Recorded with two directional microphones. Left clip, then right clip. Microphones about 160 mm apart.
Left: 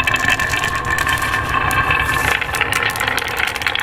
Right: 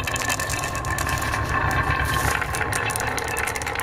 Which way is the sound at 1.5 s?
10° right (ahead or behind).